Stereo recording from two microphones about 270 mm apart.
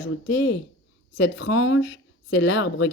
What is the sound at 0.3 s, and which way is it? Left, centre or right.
Speech, left.